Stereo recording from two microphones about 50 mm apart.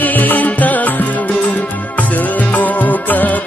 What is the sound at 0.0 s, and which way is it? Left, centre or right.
Music, left.